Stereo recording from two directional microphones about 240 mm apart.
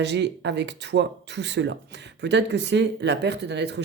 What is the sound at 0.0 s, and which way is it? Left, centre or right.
Speech, right.